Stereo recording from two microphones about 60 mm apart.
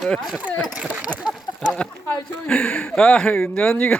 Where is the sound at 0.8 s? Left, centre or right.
Centre.